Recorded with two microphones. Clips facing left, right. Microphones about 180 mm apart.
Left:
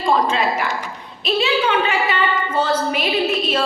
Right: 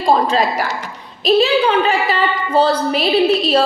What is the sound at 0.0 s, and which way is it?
A woman's voice, 35° right (ahead or behind).